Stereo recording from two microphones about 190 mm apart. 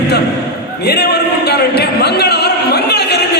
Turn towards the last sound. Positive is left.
turn(degrees=60)  # may be behind; listen again after turning